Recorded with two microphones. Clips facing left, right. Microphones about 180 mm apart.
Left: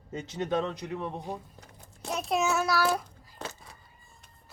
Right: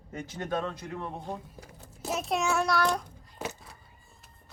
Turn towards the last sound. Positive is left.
turn(degrees=-10)  # may be behind; listen again after turning